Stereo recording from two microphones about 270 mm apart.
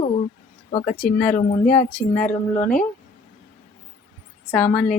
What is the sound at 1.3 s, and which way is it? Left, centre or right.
Speech, left.